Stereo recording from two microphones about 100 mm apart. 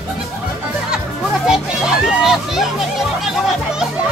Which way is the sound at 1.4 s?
5° right (ahead or behind).